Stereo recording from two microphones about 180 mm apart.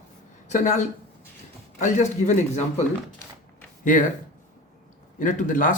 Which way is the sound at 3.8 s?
45° left (ahead or behind).